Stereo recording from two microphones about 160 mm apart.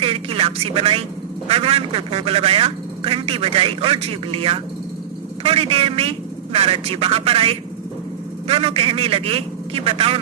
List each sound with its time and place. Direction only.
0.0 s a man's voice: 35° right (ahead or behind)